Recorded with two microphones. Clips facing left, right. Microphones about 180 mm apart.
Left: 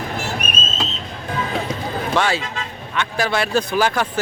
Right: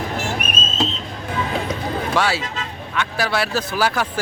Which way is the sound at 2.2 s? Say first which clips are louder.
Left 2 dB; 5° right (ahead or behind).